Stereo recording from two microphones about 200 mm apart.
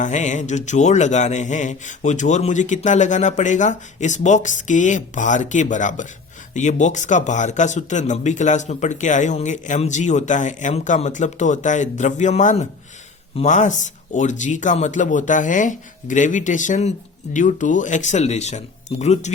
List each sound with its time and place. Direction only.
0.0 s speech: 35° left (ahead or behind)